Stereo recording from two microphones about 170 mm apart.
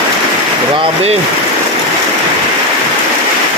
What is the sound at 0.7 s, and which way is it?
Speech, 35° right (ahead or behind).